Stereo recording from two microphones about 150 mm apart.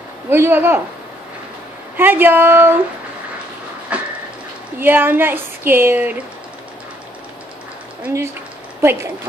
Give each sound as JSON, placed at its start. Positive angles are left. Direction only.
{"t": 0.3, "sound": "speech", "side_deg": -15}
{"t": 2.0, "sound": "speech", "side_deg": -15}
{"t": 3.9, "sound": "a sound", "side_deg": -10}
{"t": 4.7, "sound": "speech", "side_deg": -15}
{"t": 8.0, "sound": "speech", "side_deg": -15}